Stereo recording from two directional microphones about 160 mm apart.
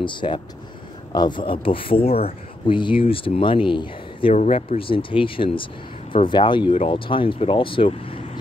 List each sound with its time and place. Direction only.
0.0 s speech: 30° left (ahead or behind)
4.3 s speech: 45° left (ahead or behind)